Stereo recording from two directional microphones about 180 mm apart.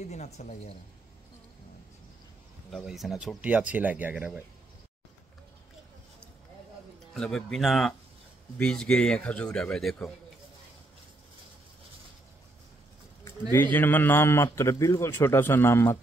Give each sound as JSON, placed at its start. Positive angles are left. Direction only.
{"t": 0.0, "sound": "speech", "side_deg": 40}
{"t": 2.7, "sound": "speech", "side_deg": 0}
{"t": 7.2, "sound": "a man's voice", "side_deg": 5}
{"t": 13.5, "sound": "a man's voice", "side_deg": 10}